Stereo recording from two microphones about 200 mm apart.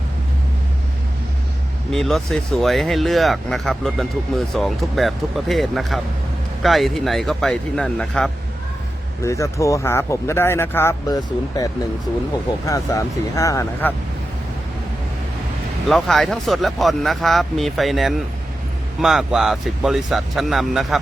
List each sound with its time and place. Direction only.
1.9 s speech: centre (ahead or behind)
9.2 s speech: 15° left (ahead or behind)
15.9 s speech: centre (ahead or behind)